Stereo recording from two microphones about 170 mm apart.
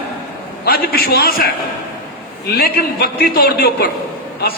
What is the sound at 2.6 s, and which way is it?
A man's voice, 65° left (ahead or behind).